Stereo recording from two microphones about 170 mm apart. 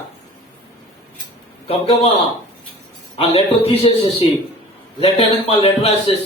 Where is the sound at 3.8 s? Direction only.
35° left (ahead or behind).